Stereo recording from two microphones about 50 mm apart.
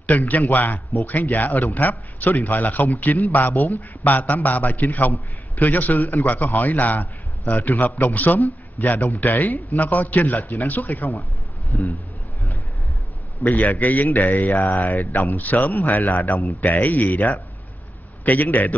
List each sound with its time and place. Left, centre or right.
0.3 s a man's voice: left
11.7 s speech: left
13.4 s a man's voice: left